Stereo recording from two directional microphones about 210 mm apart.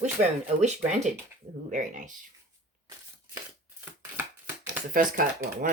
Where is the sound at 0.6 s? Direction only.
35° right (ahead or behind).